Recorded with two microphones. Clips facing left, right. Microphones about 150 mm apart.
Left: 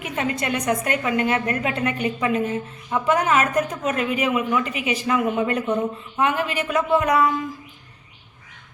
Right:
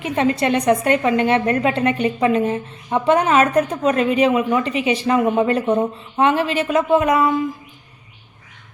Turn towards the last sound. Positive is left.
turn(degrees=-20)  # may be behind; listen again after turning